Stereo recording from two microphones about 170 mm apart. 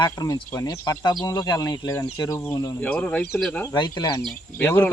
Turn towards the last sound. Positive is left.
turn(degrees=10)  # may be behind; listen again after turning